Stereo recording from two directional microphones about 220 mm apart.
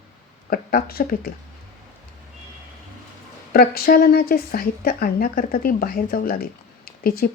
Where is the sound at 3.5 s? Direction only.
40° left (ahead or behind).